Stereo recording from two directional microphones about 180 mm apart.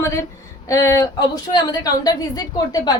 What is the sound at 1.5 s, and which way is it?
A woman's voice, 20° left (ahead or behind).